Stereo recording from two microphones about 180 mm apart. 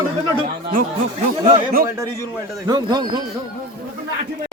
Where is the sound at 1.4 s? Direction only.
55° right (ahead or behind).